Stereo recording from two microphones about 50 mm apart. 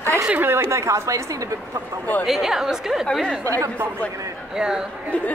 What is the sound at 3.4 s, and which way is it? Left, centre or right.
Speech, right.